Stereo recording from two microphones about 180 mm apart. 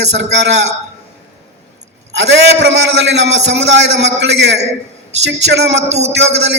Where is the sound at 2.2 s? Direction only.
75° right (ahead or behind).